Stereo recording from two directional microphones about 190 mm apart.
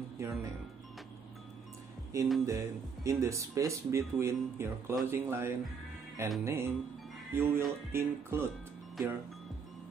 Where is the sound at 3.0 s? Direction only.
15° right (ahead or behind).